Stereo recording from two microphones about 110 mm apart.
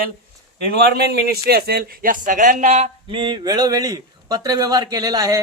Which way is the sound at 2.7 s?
85° right.